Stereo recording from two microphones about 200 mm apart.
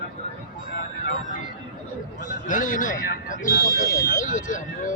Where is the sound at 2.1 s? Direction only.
40° left (ahead or behind).